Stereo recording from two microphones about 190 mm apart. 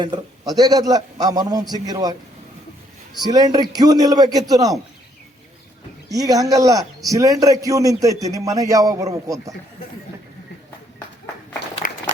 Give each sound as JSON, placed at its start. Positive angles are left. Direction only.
{"t": 0.0, "sound": "a man's voice", "side_deg": -20}
{"t": 3.2, "sound": "a man's voice", "side_deg": -20}
{"t": 6.1, "sound": "a man's voice", "side_deg": -20}
{"t": 11.8, "sound": "applause", "side_deg": 45}